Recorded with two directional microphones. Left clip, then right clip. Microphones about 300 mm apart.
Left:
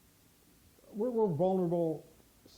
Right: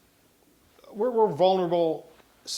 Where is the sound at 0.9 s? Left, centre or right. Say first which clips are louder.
Right 8 dB; centre.